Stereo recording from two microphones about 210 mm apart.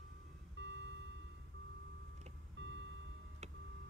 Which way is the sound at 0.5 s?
60° right (ahead or behind).